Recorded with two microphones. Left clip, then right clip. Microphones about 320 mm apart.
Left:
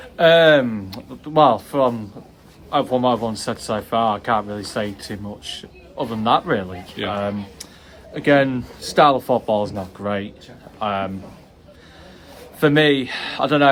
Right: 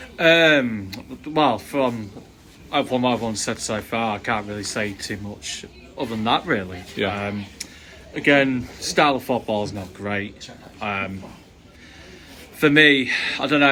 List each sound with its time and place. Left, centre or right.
0.2 s speech: centre
8.1 s speech: centre
12.5 s a man's voice: centre